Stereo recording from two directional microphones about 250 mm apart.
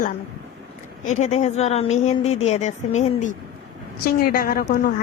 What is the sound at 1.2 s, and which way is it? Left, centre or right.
A woman's voice, left.